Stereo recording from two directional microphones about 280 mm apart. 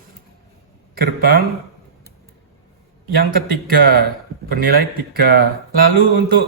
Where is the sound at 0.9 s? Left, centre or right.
Right.